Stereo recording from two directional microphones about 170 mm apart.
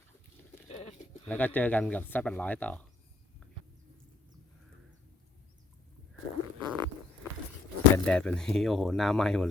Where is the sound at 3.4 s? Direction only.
5° left (ahead or behind).